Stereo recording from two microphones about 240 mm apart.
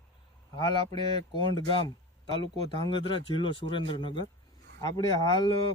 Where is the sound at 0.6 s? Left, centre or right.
Centre.